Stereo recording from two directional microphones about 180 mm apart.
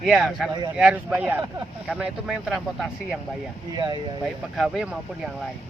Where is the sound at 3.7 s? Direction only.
20° right (ahead or behind).